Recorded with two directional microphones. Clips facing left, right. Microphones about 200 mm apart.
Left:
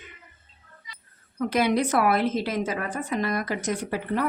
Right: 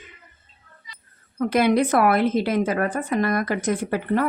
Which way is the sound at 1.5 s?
55° right (ahead or behind).